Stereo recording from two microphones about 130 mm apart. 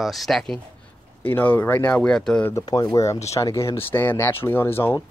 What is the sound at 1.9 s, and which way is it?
Speech, 5° left (ahead or behind).